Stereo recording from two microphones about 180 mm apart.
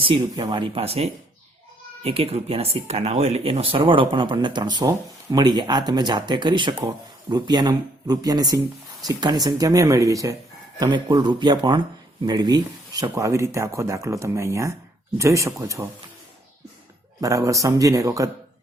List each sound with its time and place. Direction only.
0.0 s speech: 30° right (ahead or behind)
17.2 s speech: 20° right (ahead or behind)